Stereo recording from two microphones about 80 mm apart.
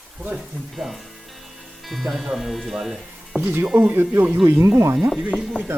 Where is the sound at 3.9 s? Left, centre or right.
Right.